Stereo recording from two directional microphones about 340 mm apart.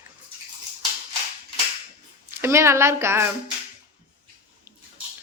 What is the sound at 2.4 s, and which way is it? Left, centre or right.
Speech, centre.